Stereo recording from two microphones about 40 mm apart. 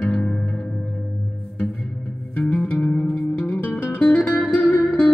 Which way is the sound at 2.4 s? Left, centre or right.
Left.